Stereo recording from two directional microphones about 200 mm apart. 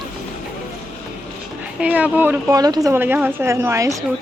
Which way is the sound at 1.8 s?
5° right (ahead or behind).